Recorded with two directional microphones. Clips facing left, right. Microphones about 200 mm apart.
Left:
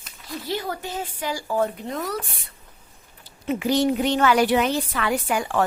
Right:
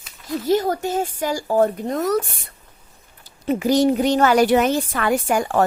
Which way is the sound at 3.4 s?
40° right (ahead or behind).